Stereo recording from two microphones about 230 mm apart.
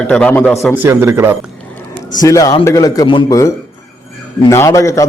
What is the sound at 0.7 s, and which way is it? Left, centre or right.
Speech, centre.